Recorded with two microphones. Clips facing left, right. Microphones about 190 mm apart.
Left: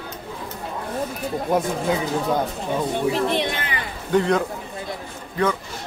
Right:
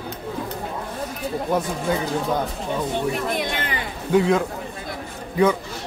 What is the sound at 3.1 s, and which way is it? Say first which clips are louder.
Speech: left 3 dB; 30° left (ahead or behind).